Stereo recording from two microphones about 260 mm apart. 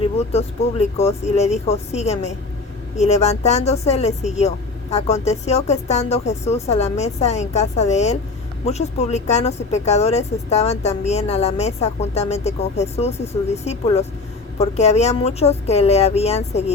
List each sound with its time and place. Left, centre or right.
0.2 s speech: left